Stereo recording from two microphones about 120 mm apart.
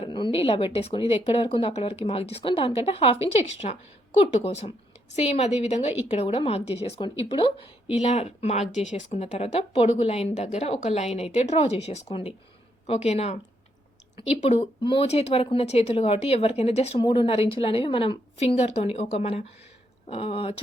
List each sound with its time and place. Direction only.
0.0 s speech: 45° left (ahead or behind); by 5.9 s 65° left (ahead or behind)
6.1 s speech: 50° left (ahead or behind)
7.0 s speech: 45° left (ahead or behind)
8.0 s speech: 60° left (ahead or behind)
8.7 s speech: 80° left; by 17.0 s 60° left (ahead or behind)
17.0 s speech: 45° left (ahead or behind)